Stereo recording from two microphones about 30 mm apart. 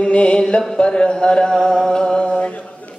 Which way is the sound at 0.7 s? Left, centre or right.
Left.